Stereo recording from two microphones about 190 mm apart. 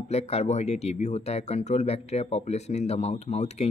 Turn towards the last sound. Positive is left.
turn(degrees=35)  # may be behind; listen again after turning